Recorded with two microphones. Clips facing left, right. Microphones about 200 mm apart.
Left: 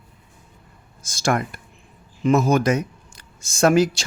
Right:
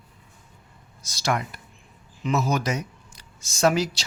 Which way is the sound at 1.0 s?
50° left (ahead or behind).